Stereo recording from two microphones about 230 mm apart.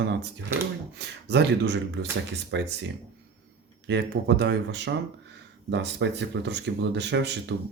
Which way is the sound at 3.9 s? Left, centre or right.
Right.